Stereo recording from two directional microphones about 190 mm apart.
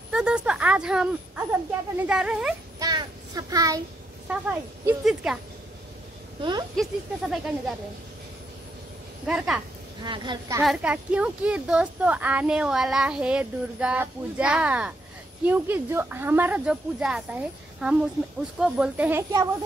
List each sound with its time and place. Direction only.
0.1 s speech: 5° right (ahead or behind)
2.8 s child singing: 20° right (ahead or behind)
4.3 s speech: 5° right (ahead or behind)
6.8 s speech: centre (ahead or behind)
9.2 s speech: centre (ahead or behind)
10.0 s a woman's voice: 25° right (ahead or behind)
10.6 s speech: 5° right (ahead or behind)